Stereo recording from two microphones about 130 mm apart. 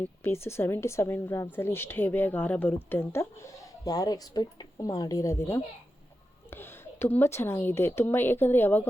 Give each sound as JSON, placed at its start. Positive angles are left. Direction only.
{"t": 0.0, "sound": "a woman's voice", "side_deg": 20}